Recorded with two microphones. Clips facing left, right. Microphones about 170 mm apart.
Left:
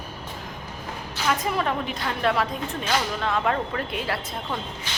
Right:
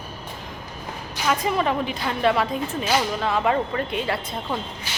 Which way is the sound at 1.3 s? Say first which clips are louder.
Right 3 dB; centre (ahead or behind).